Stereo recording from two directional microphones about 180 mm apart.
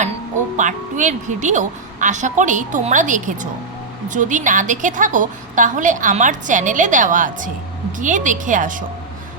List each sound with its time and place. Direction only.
0.5 s a woman's voice: 45° right (ahead or behind)